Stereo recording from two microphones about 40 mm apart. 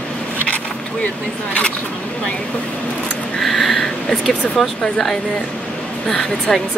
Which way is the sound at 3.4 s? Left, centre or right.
Centre.